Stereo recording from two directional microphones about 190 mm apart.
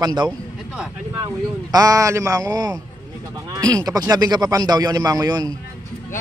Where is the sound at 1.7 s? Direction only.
20° right (ahead or behind).